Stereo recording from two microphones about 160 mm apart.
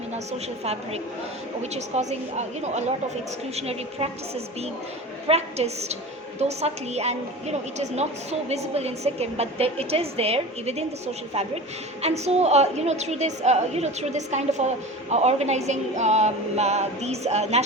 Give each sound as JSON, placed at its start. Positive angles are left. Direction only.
{"t": 1.7, "sound": "music", "side_deg": -45}
{"t": 3.5, "sound": "a woman's voice", "side_deg": -40}
{"t": 5.3, "sound": "a woman's voice", "side_deg": -40}
{"t": 12.0, "sound": "music", "side_deg": -40}